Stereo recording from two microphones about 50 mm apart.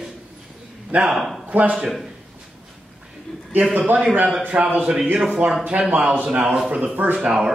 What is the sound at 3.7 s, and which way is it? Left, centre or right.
A man's voice, right.